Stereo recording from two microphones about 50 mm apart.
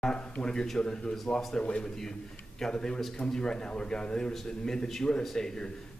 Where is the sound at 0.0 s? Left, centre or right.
Centre.